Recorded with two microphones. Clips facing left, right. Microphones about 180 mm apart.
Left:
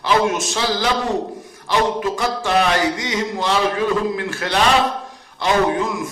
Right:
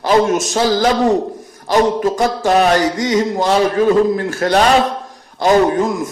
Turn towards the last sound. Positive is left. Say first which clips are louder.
# right 5 dB
turn(degrees=-40)  # may be behind; listen again after turning